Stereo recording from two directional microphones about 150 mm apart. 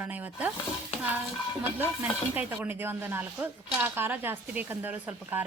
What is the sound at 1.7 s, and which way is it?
Speech, 10° right (ahead or behind).